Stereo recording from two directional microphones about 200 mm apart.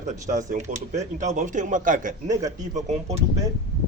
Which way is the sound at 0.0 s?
40° right (ahead or behind).